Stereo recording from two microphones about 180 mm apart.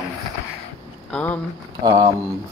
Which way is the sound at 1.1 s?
10° left (ahead or behind).